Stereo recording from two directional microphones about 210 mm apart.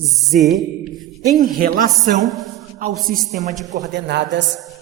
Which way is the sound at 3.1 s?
40° right (ahead or behind).